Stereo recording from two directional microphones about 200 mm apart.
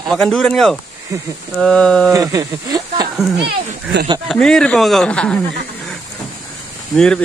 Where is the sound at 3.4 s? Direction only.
55° right (ahead or behind).